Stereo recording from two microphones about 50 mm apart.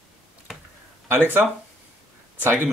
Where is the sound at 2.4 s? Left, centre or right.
Right.